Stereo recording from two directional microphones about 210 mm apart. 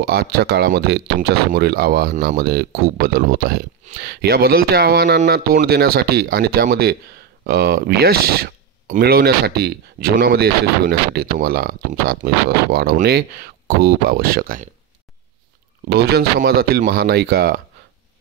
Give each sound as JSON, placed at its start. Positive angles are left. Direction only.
{"t": 0.0, "sound": "speech", "side_deg": -45}
{"t": 15.9, "sound": "speech", "side_deg": -50}